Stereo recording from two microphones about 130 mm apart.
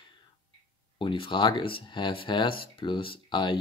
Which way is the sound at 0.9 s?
40° left (ahead or behind).